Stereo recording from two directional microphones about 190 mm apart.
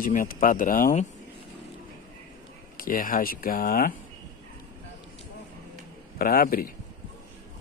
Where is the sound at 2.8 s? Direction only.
45° left (ahead or behind).